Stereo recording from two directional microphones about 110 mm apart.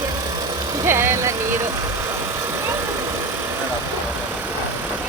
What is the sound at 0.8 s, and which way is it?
Speech, 20° right (ahead or behind).